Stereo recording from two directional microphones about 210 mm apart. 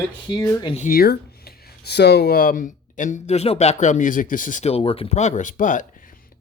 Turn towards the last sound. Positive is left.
turn(degrees=35)  # may be behind; listen again after turning